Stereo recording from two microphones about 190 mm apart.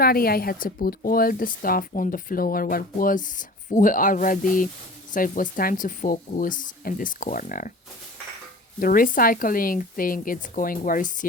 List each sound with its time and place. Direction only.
0.0 s speech: 50° left (ahead or behind)
8.8 s speech: 45° left (ahead or behind)